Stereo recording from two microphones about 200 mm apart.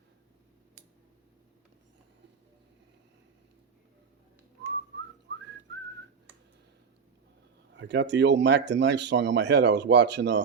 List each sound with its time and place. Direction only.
7.7 s speech: 60° right (ahead or behind)